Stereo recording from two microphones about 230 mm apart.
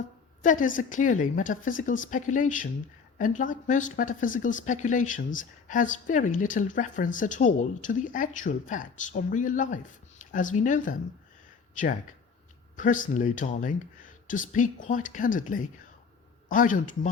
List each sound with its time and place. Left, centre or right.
0.4 s speech: left
12.7 s speech: left